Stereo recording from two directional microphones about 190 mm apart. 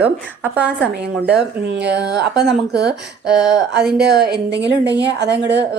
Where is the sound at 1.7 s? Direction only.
65° right (ahead or behind).